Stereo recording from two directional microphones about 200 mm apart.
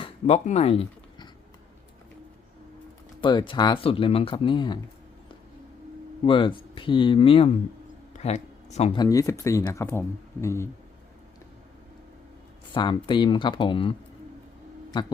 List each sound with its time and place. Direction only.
0.0 s a sound: 35° left (ahead or behind)
3.2 s speech: 25° left (ahead or behind)
6.2 s speech: 25° left (ahead or behind)
9.0 s speech: 15° left (ahead or behind)
12.7 s speech: 25° left (ahead or behind)
14.9 s speech: 25° left (ahead or behind)